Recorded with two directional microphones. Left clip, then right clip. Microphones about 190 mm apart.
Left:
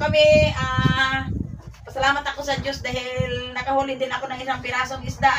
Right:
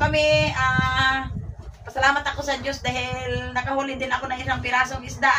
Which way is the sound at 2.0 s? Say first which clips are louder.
Right 1 dB; 5° right (ahead or behind).